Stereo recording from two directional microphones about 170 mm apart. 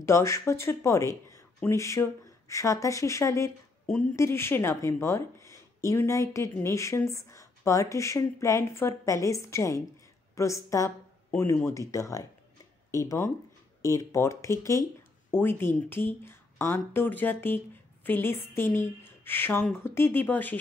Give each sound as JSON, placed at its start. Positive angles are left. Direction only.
{"t": 0.0, "sound": "speech", "side_deg": 15}